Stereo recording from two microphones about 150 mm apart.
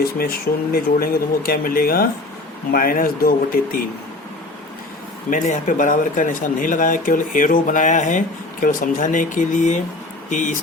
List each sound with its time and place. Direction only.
0.2 s speech: 80° left
5.3 s speech: 60° left (ahead or behind)
8.6 s speech: 65° left (ahead or behind)